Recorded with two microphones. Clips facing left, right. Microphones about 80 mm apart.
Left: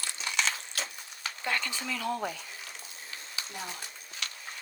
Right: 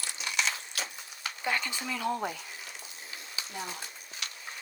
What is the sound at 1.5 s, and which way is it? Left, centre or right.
Speech, centre.